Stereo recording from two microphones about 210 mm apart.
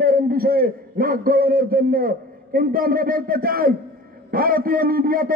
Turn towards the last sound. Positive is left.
turn(degrees=-45)  # may be behind; listen again after turning